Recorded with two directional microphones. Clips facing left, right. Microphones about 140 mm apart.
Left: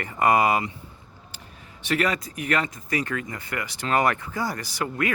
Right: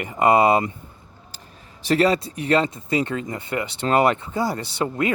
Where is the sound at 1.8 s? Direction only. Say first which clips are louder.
Right 6 dB; 35° right (ahead or behind).